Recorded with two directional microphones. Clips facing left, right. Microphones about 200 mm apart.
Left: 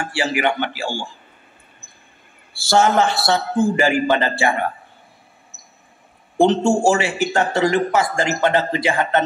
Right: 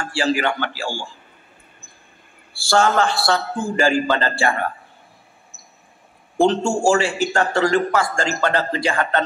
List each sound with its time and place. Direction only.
0.0 s a man's voice: 20° left (ahead or behind)
2.6 s a man's voice: 20° left (ahead or behind)
6.4 s a man's voice: 20° left (ahead or behind)